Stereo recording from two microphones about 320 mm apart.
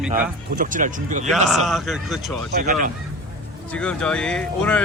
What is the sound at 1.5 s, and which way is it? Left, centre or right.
Speech, centre.